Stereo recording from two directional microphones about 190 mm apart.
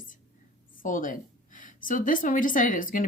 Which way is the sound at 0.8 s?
45° left (ahead or behind).